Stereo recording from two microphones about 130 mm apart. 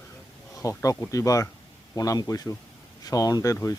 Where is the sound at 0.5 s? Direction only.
25° left (ahead or behind).